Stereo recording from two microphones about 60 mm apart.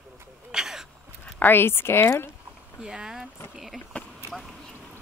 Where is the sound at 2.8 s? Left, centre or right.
Centre.